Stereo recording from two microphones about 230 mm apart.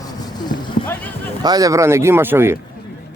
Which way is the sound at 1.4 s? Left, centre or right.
Centre.